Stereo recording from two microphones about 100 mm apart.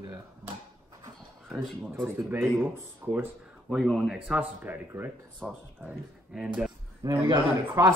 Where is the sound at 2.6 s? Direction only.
20° right (ahead or behind).